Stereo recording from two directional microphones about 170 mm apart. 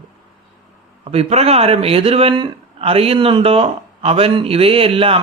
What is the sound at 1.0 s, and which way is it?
A man's voice, 35° right (ahead or behind).